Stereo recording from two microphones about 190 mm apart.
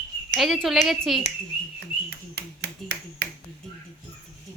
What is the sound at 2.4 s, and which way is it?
Finger snapping, 60° right (ahead or behind).